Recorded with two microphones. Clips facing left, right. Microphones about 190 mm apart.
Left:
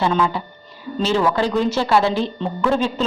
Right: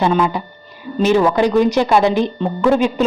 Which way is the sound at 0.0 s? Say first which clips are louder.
Right 3 dB; 15° right (ahead or behind).